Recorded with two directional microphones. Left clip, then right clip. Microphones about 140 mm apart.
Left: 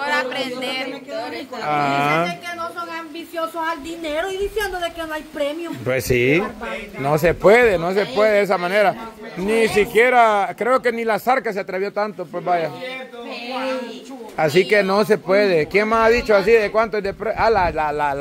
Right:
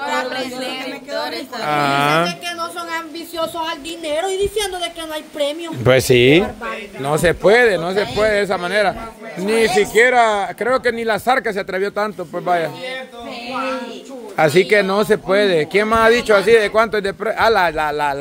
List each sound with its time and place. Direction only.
0.0 s a sound: 40° left (ahead or behind)
1.6 s speech: 25° right (ahead or behind)
3.6 s speech: 15° right (ahead or behind)
5.9 s speech: 40° right (ahead or behind)
7.0 s speech: 5° right (ahead or behind)
14.3 s speech: 25° right (ahead or behind)
14.6 s speech: 10° right (ahead or behind)